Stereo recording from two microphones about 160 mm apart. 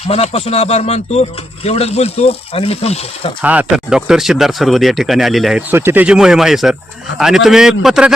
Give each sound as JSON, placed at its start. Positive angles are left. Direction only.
{"t": 0.1, "sound": "speech", "side_deg": 40}
{"t": 3.4, "sound": "speech", "side_deg": -10}
{"t": 5.7, "sound": "speech", "side_deg": -15}